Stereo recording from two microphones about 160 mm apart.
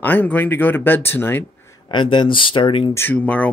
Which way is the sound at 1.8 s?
30° left (ahead or behind).